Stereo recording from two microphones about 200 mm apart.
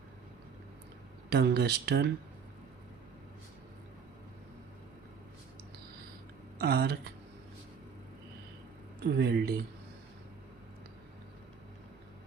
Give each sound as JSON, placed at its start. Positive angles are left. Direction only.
{"t": 1.3, "sound": "speech", "side_deg": -55}
{"t": 6.6, "sound": "speech", "side_deg": -50}
{"t": 9.0, "sound": "speech", "side_deg": -55}